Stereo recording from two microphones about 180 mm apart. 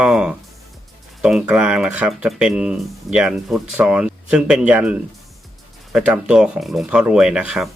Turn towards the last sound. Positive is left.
turn(degrees=-5)  # may be behind; listen again after turning